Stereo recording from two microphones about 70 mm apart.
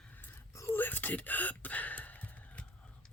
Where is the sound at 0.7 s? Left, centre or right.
Left.